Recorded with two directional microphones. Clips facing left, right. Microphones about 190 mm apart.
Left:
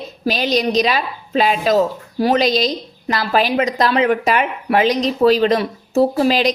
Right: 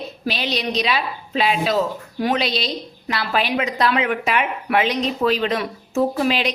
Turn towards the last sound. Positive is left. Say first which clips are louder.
# left 5 dB
turn(degrees=40)  # may be behind; listen again after turning